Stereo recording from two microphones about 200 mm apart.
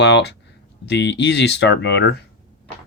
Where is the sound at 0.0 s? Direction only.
60° left (ahead or behind).